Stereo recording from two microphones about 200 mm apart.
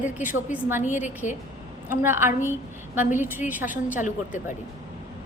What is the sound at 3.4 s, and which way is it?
Speech, 35° left (ahead or behind).